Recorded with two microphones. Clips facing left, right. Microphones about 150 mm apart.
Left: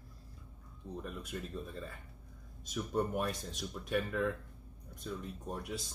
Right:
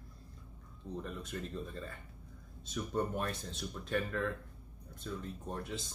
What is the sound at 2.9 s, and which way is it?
Speech, 10° left (ahead or behind).